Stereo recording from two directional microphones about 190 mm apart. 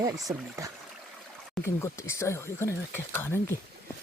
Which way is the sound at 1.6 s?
15° left (ahead or behind).